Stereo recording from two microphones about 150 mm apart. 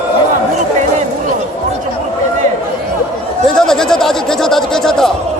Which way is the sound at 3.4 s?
5° left (ahead or behind).